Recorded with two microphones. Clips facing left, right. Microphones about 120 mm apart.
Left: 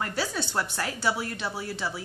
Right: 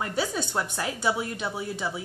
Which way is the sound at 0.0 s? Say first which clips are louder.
Right 2 dB; 15° right (ahead or behind).